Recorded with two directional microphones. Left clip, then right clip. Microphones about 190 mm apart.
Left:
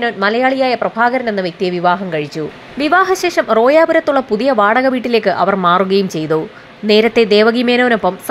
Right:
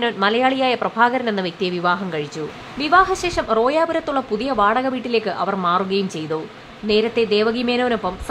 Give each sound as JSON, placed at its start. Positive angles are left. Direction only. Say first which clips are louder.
{"t": 0.0, "sound": "speech", "louder": "left 4 dB", "side_deg": 5}
{"t": 2.8, "sound": "a woman's voice", "louder": "left 4 dB", "side_deg": 20}